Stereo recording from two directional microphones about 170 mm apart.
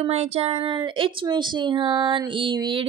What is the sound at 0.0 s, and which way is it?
A woman's voice, 40° right (ahead or behind).